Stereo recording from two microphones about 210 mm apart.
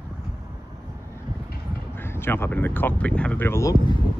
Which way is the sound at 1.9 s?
10° left (ahead or behind).